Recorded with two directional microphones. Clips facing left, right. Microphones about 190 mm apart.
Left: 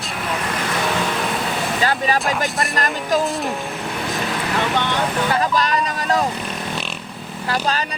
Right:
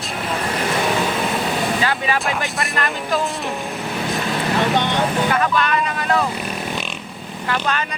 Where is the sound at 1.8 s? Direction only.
40° left (ahead or behind).